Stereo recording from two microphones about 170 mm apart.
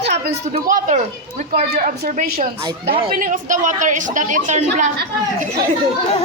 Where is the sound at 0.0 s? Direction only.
80° right.